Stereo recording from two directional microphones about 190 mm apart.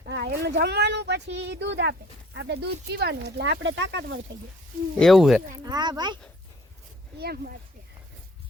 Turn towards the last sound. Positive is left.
turn(degrees=-55)  # may be behind; listen again after turning